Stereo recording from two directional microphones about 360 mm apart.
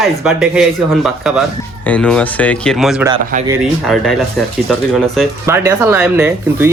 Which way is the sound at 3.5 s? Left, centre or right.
Centre.